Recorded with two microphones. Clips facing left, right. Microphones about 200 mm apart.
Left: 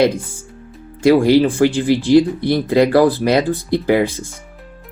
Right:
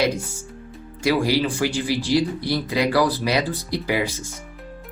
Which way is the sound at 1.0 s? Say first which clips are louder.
Left 9 dB; 55° left (ahead or behind).